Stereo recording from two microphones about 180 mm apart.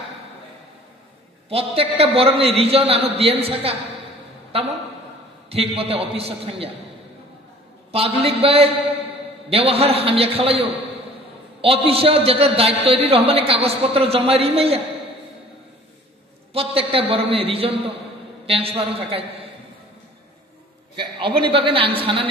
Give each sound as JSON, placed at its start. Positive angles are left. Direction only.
{"t": 1.5, "sound": "a man's voice", "side_deg": -35}
{"t": 7.9, "sound": "a man's voice", "side_deg": -35}
{"t": 16.5, "sound": "a man's voice", "side_deg": -30}
{"t": 20.9, "sound": "a woman's voice", "side_deg": -25}